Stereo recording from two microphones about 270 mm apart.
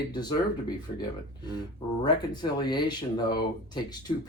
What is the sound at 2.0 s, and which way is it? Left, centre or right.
Speech, centre.